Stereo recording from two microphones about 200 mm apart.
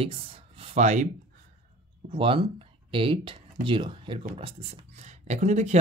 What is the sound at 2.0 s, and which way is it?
Speech, 25° right (ahead or behind).